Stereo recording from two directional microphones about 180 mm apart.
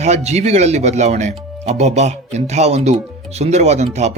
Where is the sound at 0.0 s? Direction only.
35° right (ahead or behind).